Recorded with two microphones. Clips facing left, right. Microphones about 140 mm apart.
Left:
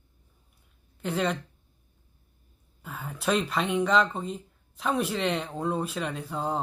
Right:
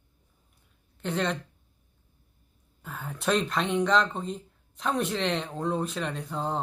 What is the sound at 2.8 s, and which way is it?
Speech, centre (ahead or behind).